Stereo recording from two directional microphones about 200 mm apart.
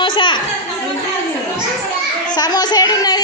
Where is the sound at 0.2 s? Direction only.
25° left (ahead or behind).